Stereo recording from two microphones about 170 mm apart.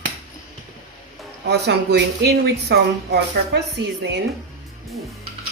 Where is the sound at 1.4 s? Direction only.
85° right.